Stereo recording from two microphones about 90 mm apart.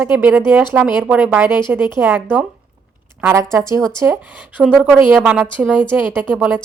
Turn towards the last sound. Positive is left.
turn(degrees=-20)  # may be behind; listen again after turning